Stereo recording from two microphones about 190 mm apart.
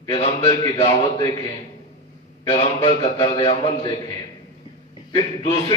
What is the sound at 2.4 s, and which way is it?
Speech, 30° left (ahead or behind).